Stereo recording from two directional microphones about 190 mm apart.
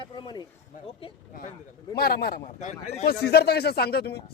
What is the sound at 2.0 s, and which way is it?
Speech, 55° left (ahead or behind).